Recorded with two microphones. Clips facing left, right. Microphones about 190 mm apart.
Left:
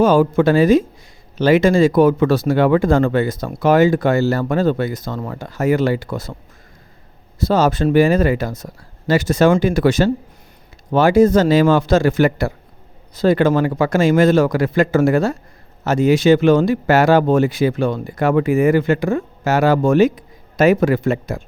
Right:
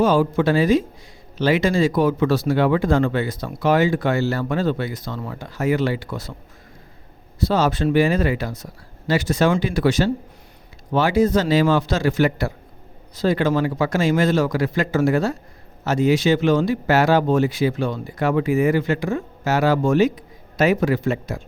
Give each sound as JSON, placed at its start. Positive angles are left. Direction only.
{"t": 0.0, "sound": "speech", "side_deg": 50}
{"t": 7.3, "sound": "speech", "side_deg": 45}